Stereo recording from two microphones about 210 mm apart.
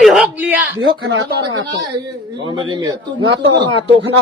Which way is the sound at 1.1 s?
65° right (ahead or behind).